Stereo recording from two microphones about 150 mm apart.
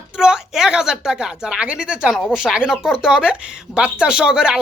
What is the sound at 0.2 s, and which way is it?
Speech, 5° right (ahead or behind).